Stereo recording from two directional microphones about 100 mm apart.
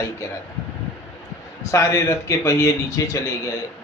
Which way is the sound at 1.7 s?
30° left (ahead or behind).